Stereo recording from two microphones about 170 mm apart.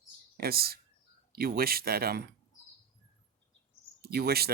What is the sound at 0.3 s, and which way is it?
Speech, 65° right (ahead or behind).